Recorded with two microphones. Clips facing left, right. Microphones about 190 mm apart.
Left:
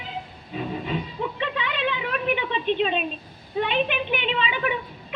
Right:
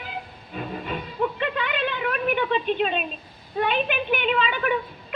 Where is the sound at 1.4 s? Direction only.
50° right (ahead or behind).